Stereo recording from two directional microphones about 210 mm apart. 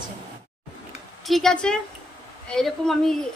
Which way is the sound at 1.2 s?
Centre (ahead or behind).